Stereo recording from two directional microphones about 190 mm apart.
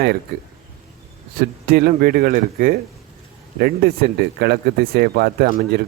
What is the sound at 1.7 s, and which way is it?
A man's voice, 50° right (ahead or behind).